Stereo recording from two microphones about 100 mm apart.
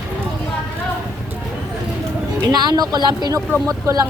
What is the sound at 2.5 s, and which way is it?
Speech, 45° right (ahead or behind).